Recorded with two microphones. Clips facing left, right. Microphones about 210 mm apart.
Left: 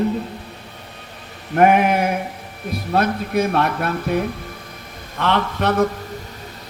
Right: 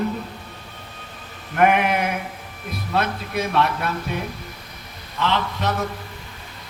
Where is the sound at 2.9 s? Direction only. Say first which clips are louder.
Left 5 dB; 50° left (ahead or behind).